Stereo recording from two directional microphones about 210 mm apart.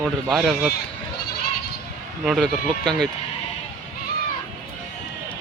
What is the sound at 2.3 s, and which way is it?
Speech, centre (ahead or behind).